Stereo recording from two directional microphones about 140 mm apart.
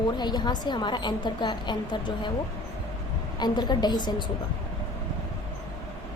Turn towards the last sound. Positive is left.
turn(degrees=30)  # may be behind; listen again after turning